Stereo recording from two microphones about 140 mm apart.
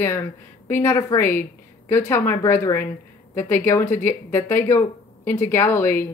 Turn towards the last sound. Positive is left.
turn(degrees=15)  # may be behind; listen again after turning